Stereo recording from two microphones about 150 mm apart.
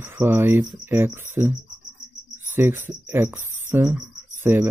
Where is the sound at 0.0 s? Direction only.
15° right (ahead or behind).